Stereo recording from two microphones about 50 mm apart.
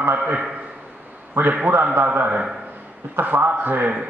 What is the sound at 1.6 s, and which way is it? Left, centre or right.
A man's voice, right.